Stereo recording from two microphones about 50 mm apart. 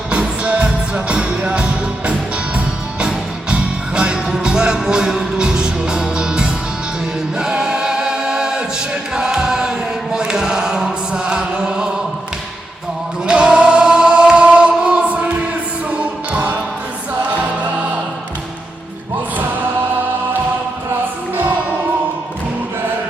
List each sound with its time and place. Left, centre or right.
0.1 s music: right
3.5 s music: centre
7.3 s choir: centre
9.1 s chant: centre
13.2 s choir: centre
16.3 s music: right